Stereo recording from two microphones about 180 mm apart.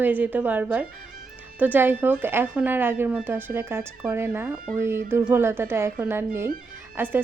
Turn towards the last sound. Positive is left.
turn(degrees=-10)  # may be behind; listen again after turning